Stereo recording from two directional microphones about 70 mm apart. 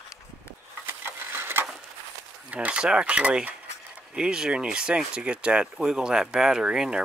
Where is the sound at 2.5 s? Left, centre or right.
Centre.